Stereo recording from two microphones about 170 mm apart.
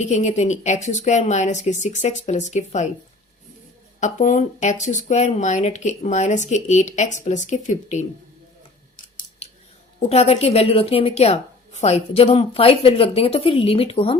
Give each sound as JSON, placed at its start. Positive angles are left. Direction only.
{"t": 0.0, "sound": "speech", "side_deg": 45}
{"t": 4.0, "sound": "speech", "side_deg": 45}
{"t": 10.1, "sound": "a woman's voice", "side_deg": 35}